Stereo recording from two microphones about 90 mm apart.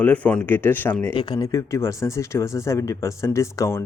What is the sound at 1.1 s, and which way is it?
Speech, 55° left (ahead or behind).